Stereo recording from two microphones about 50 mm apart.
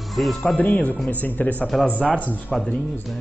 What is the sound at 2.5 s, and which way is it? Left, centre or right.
Speech, centre.